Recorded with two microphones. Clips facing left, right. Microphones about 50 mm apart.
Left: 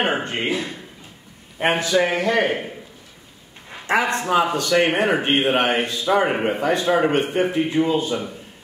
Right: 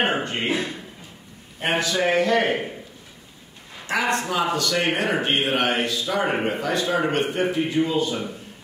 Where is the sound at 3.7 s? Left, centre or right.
Left.